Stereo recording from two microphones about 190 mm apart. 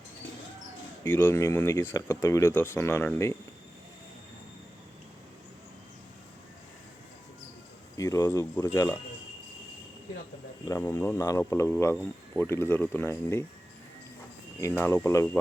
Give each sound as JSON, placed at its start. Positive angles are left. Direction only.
{"t": 1.0, "sound": "speech", "side_deg": 10}
{"t": 7.9, "sound": "speech", "side_deg": 15}
{"t": 10.7, "sound": "speech", "side_deg": 15}
{"t": 14.6, "sound": "speech", "side_deg": 10}